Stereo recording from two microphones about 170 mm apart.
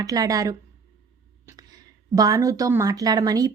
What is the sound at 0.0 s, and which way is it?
Speech, 20° right (ahead or behind).